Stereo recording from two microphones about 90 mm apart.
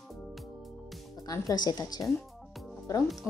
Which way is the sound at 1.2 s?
45° left (ahead or behind).